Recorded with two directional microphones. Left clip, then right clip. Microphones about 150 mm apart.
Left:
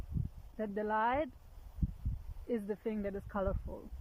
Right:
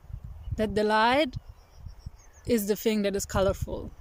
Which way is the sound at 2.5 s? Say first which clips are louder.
Right 12 dB; 20° right (ahead or behind).